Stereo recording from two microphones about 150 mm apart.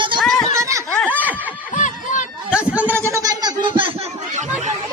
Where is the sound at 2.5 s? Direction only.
10° right (ahead or behind); by 3.5 s 25° right (ahead or behind).